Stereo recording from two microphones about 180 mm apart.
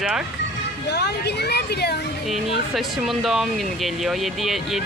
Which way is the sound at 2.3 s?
Centre (ahead or behind).